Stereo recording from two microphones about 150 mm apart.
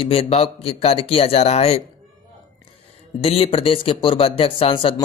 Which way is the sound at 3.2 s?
40° left (ahead or behind).